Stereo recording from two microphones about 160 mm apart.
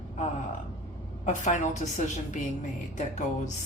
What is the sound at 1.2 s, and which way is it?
A woman's voice, 50° left (ahead or behind).